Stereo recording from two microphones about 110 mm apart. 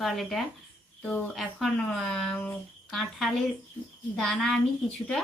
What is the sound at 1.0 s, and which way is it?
Speech, 10° left (ahead or behind).